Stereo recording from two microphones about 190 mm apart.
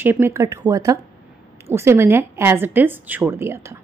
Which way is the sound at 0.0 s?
10° right (ahead or behind).